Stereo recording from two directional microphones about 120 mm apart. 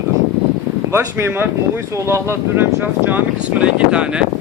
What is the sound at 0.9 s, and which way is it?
Speech, 20° right (ahead or behind).